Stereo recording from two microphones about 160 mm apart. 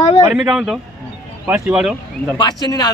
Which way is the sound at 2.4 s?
25° left (ahead or behind).